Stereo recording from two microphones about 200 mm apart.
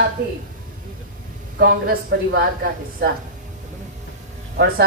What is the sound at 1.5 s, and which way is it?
Speech, 50° right (ahead or behind).